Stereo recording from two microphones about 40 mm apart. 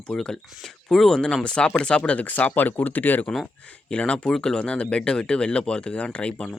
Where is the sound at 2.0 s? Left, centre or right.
Left.